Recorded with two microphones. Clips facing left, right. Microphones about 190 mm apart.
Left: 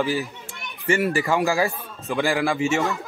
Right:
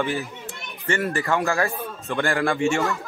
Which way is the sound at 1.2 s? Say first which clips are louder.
Left 2 dB; 5° left (ahead or behind).